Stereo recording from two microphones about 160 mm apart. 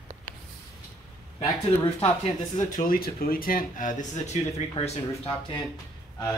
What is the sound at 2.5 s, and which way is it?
Speech, 60° left (ahead or behind).